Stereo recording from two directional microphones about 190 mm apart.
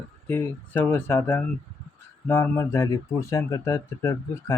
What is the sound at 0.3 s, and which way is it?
Speech, 10° left (ahead or behind).